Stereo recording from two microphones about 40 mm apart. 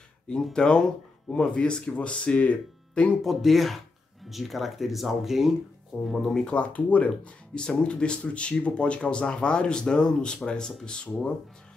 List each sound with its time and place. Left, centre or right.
0.5 s speech: left
3.2 s speech: centre
6.4 s speech: left
7.5 s speech: left